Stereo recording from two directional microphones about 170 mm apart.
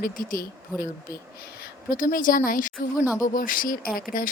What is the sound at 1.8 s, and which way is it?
Speech, 55° left (ahead or behind).